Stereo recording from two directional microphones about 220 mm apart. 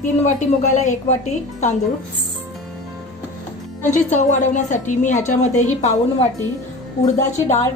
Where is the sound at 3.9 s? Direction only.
35° left (ahead or behind).